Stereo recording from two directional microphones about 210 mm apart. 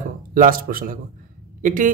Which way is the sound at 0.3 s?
40° right (ahead or behind).